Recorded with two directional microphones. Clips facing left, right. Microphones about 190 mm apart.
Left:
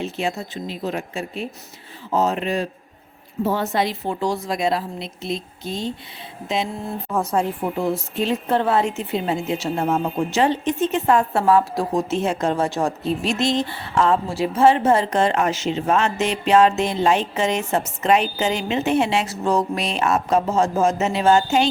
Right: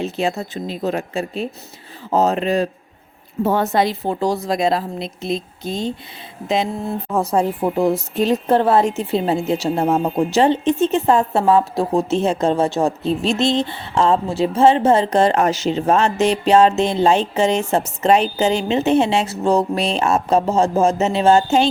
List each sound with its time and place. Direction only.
0.0 s a woman's voice: 35° right (ahead or behind)
7.1 s a woman's voice: 30° right (ahead or behind)